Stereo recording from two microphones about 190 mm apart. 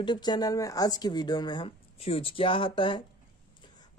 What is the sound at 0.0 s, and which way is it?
Speech, 20° left (ahead or behind).